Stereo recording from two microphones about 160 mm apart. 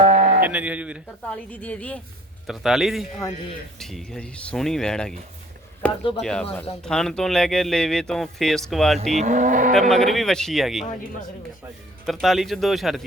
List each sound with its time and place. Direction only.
0.0 s sheep: 50° right (ahead or behind)
0.4 s speech: 10° right (ahead or behind)
1.3 s a woman's voice: 10° left (ahead or behind)
2.5 s speech: centre (ahead or behind)
5.8 s a sound: 10° left (ahead or behind)
6.2 s speech: 5° left (ahead or behind)
9.0 s livestock: 45° right (ahead or behind)
9.9 s speech: 5° left (ahead or behind)
12.0 s speech: centre (ahead or behind)